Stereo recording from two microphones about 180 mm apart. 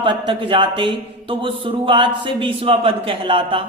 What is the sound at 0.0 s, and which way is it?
Speech, 25° right (ahead or behind).